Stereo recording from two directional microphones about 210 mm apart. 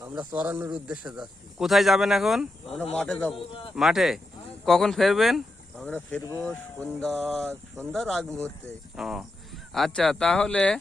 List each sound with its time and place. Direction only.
0.0 s speech: 15° right (ahead or behind); by 10.8 s 5° left (ahead or behind)